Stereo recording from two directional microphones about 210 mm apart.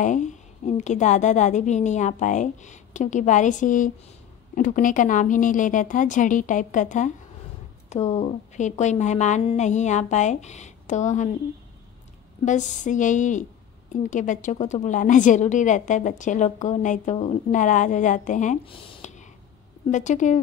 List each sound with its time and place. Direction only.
0.0 s a woman's voice: 35° left (ahead or behind)
12.4 s a woman's voice: 35° left (ahead or behind)
18.7 s a woman's voice: 25° left (ahead or behind)